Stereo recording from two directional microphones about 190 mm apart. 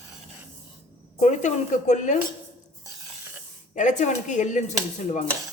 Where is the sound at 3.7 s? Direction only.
40° left (ahead or behind).